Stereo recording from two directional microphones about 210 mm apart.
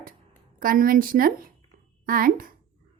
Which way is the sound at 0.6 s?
40° right (ahead or behind).